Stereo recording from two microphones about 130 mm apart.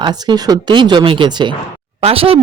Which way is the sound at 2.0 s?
50° right (ahead or behind).